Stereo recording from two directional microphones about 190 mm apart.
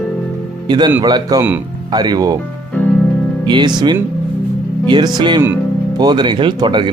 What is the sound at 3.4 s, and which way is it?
Speech, 25° right (ahead or behind).